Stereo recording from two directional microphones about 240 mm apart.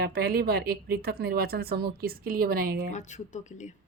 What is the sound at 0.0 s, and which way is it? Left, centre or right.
Speech, right.